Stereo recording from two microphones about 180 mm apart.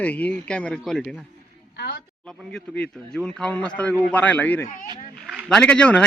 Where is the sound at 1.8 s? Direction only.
65° left (ahead or behind).